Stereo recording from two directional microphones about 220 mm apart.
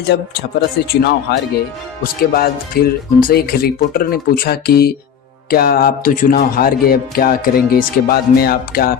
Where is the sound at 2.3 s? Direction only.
45° left (ahead or behind).